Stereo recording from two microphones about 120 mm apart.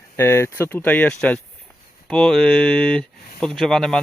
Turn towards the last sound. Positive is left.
turn(degrees=5)  # may be behind; listen again after turning